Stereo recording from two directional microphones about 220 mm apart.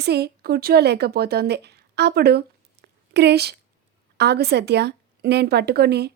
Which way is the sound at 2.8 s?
50° right (ahead or behind).